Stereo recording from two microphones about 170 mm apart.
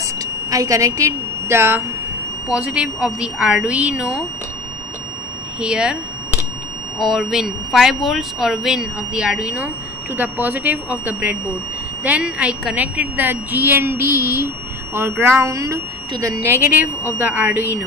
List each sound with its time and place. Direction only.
0.0 s a sound: 20° right (ahead or behind)
2.4 s speech: 10° right (ahead or behind)
5.6 s speech: 5° right (ahead or behind)
7.0 s speech: centre (ahead or behind)